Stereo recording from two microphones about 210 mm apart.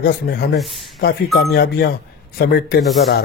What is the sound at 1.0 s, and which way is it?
Speech, 50° left (ahead or behind).